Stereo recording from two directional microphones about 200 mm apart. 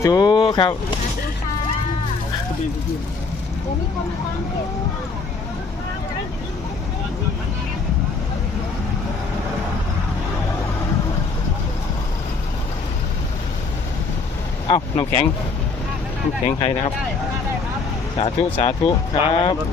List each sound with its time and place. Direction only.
0.0 s speech: 20° left (ahead or behind)
14.7 s speech: 25° left (ahead or behind)
16.5 s speech: 25° left (ahead or behind)
18.2 s speech: 25° left (ahead or behind)